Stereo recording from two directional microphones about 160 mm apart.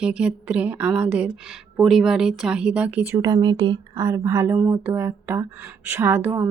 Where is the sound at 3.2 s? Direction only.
25° right (ahead or behind).